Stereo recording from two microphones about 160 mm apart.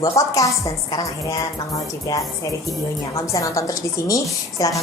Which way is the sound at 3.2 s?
20° left (ahead or behind).